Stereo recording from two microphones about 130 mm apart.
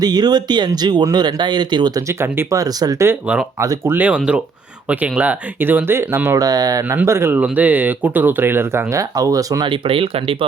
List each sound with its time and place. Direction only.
0.0 s speech: 30° right (ahead or behind); by 3.4 s 15° right (ahead or behind)
3.6 s speech: 25° right (ahead or behind)
3.9 s speech: 10° right (ahead or behind); by 6.8 s 30° right (ahead or behind)
6.8 s speech: 15° right (ahead or behind)
9.6 s speech: 40° right (ahead or behind)